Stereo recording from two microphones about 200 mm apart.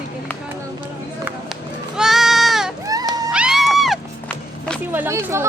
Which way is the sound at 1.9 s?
Centre (ahead or behind).